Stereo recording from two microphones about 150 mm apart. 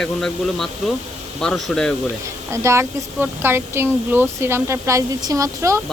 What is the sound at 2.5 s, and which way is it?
Speech, 20° right (ahead or behind).